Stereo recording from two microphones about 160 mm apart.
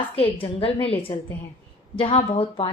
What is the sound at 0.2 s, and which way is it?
A woman's voice, 35° left (ahead or behind).